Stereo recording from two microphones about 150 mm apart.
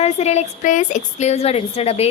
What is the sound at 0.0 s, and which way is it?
A woman's voice, 45° left (ahead or behind).